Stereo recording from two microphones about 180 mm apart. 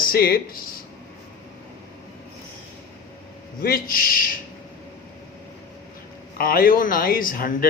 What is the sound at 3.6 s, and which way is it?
Speech, 55° left (ahead or behind).